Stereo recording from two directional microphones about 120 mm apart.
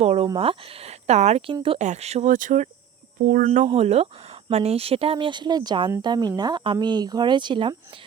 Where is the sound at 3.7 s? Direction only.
60° right (ahead or behind).